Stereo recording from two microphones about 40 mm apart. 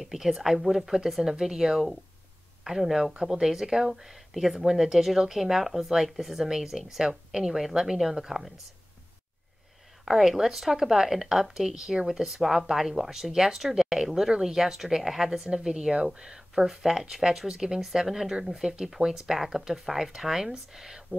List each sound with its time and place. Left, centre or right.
0.0 s speech: centre
10.0 s speech: centre